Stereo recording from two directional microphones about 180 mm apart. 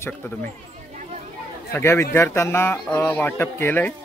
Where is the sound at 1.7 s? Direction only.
15° left (ahead or behind).